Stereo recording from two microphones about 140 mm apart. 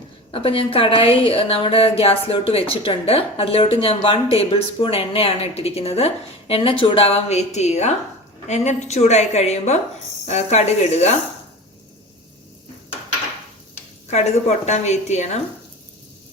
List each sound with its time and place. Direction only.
0.3 s speech: 40° left (ahead or behind)
14.1 s speech: 55° left (ahead or behind)